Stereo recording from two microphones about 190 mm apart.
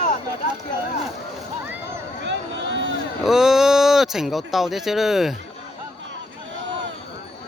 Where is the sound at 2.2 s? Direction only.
70° right (ahead or behind).